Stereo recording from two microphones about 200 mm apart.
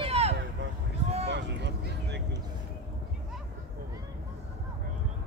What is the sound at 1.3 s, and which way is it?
Vehicle, 60° right (ahead or behind).